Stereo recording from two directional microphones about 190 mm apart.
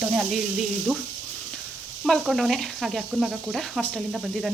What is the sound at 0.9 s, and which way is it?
Speech, 5° right (ahead or behind).